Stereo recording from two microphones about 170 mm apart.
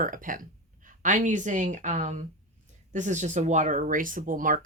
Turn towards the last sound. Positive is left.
turn(degrees=-50)  # may be behind; listen again after turning